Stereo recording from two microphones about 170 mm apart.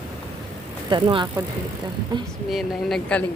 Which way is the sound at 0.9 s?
25° right (ahead or behind).